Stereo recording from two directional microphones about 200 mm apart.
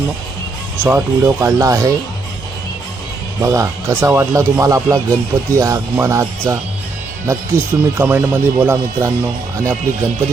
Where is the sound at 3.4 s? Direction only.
15° right (ahead or behind).